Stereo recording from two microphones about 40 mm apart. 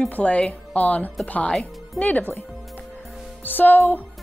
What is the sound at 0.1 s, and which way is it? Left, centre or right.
Speech, left.